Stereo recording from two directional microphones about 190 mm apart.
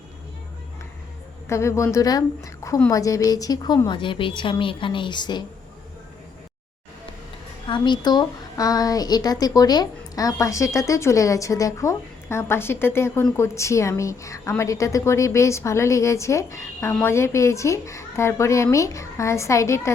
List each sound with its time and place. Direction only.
1.5 s a woman's voice: 15° left (ahead or behind)
7.7 s a woman's voice: 25° left (ahead or behind)